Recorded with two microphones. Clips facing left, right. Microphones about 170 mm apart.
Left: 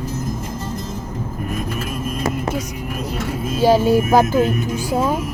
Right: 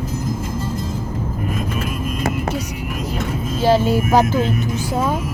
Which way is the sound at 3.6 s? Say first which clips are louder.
Left 2 dB; 15° left (ahead or behind).